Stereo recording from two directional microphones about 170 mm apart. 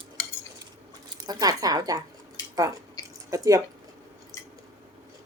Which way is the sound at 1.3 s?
20° right (ahead or behind).